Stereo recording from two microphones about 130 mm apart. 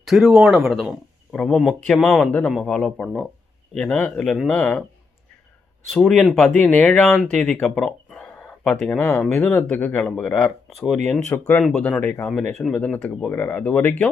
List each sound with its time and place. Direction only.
0.0 s speech: centre (ahead or behind)
5.9 s speech: centre (ahead or behind)